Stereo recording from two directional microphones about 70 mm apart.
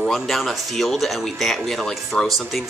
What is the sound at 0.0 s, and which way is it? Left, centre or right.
Speech, centre.